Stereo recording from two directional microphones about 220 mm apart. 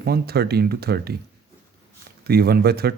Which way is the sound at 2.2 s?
45° right (ahead or behind).